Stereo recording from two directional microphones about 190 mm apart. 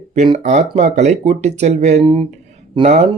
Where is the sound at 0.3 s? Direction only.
40° right (ahead or behind).